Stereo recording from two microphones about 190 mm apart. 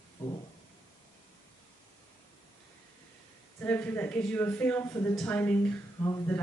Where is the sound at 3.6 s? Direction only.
10° left (ahead or behind).